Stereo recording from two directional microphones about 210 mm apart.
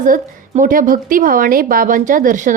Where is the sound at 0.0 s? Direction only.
40° right (ahead or behind).